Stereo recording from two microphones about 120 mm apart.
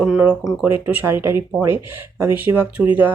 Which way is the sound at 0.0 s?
10° right (ahead or behind).